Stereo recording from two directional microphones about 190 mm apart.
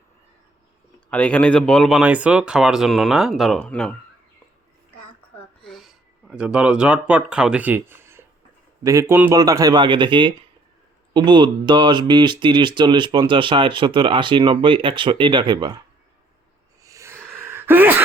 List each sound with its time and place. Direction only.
1.1 s speech: 5° left (ahead or behind)
5.6 s speech: centre (ahead or behind); by 15.8 s 25° right (ahead or behind)
16.8 s a sound: 15° right (ahead or behind)